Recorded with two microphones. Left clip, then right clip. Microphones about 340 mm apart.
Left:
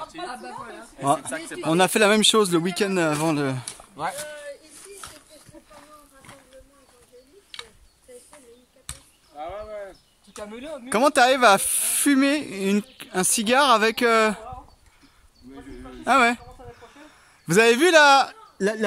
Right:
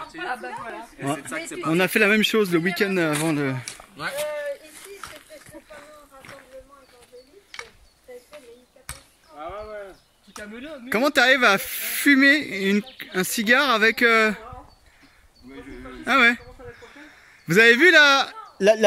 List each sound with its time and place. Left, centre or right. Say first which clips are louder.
1.0 s speech: left 7 dB; centre
1.3 s speech: right 1 dB; left
1.7 s speech: left 1 dB; centre
9.4 s a sound: left 1 dB; centre
10.5 s speech: even; centre
15.5 s speech: right 2 dB; centre
17.5 s speech: right 3 dB; centre